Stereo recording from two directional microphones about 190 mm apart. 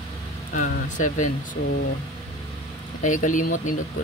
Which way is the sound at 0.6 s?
45° left (ahead or behind).